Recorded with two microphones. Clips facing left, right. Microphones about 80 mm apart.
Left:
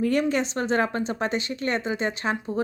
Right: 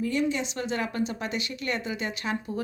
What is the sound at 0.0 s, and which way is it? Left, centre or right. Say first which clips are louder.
Speech: left 4 dB; left.